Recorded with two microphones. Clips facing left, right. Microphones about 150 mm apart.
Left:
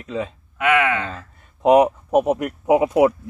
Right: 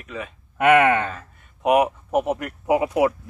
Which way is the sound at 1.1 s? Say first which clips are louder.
Left 2 dB; 20° left (ahead or behind).